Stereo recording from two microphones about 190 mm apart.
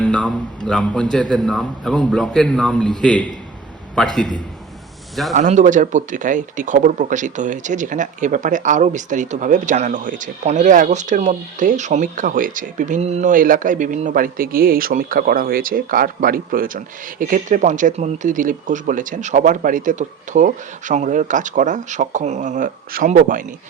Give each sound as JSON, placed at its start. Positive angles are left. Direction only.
{"t": 0.0, "sound": "a man's voice", "side_deg": 5}
{"t": 5.3, "sound": "speech", "side_deg": -40}